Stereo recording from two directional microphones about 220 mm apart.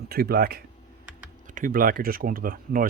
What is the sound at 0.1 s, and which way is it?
Speech, 45° right (ahead or behind).